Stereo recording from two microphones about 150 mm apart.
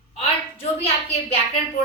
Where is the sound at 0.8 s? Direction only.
40° left (ahead or behind).